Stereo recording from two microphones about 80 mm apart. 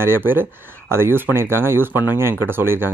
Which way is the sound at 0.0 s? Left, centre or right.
Right.